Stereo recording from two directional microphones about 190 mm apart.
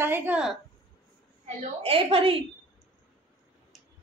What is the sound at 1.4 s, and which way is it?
Speech, 30° right (ahead or behind).